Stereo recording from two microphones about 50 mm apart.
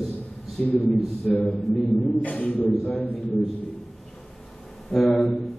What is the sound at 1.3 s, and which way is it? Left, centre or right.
Speech, centre.